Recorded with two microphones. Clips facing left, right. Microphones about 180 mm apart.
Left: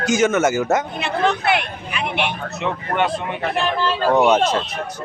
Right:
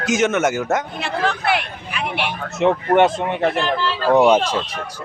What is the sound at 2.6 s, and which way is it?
Speech, 45° right (ahead or behind).